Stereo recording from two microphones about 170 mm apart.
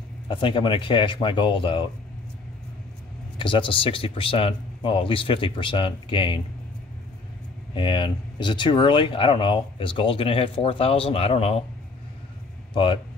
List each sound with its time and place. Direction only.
0.3 s speech: 30° left (ahead or behind)
3.3 s speech: 30° left (ahead or behind)
7.7 s speech: 30° left (ahead or behind)
12.7 s speech: 30° left (ahead or behind)